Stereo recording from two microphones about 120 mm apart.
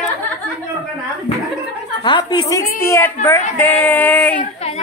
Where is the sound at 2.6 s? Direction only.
20° left (ahead or behind).